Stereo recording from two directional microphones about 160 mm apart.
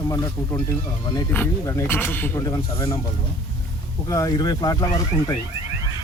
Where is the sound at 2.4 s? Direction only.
25° left (ahead or behind).